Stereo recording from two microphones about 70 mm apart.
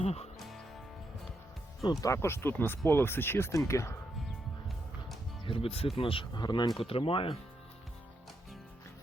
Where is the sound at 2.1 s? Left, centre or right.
Left.